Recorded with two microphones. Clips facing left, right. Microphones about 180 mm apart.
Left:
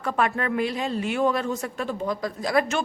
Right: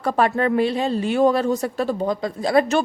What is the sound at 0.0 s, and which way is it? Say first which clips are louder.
Speech: right 6 dB; 35° right (ahead or behind).